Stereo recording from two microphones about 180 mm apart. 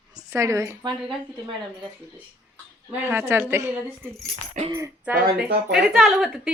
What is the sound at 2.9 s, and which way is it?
A woman's voice, 10° right (ahead or behind).